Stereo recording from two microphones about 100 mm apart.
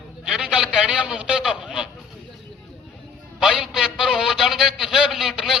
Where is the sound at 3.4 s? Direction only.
5° right (ahead or behind).